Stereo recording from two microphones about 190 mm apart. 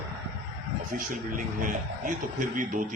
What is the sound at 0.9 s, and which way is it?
A man's voice, 45° right (ahead or behind).